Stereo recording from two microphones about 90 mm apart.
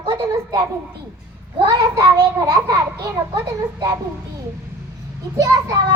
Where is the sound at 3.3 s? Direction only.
60° right (ahead or behind).